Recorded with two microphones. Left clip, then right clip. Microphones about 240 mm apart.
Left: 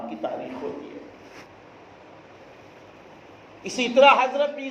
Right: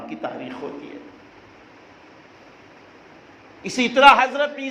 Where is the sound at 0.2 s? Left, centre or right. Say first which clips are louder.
Even; right.